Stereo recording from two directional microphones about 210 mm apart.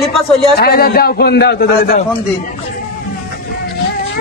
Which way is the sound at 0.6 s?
45° left (ahead or behind).